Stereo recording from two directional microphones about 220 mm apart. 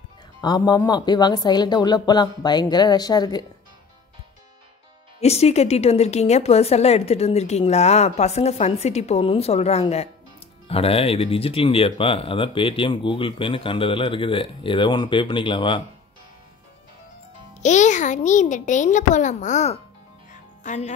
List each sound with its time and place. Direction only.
0.4 s speech: 20° left (ahead or behind)
5.2 s speech: 30° left (ahead or behind)
17.6 s a child's voice: 35° left (ahead or behind)